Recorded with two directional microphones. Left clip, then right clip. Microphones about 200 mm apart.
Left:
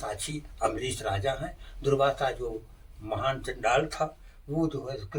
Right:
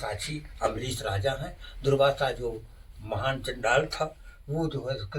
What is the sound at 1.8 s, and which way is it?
Speech, 20° left (ahead or behind).